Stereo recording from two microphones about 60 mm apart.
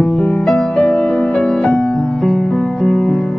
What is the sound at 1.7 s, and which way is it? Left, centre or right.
Music, centre.